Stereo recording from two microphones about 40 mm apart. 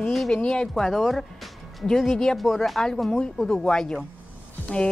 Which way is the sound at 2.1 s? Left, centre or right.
Centre.